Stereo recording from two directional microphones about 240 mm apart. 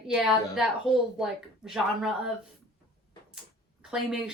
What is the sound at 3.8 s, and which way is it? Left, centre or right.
Speech, centre.